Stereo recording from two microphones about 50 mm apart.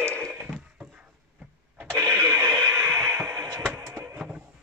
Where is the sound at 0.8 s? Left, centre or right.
Right.